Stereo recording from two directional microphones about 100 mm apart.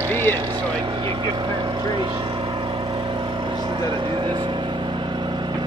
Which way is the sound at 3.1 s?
50° right (ahead or behind).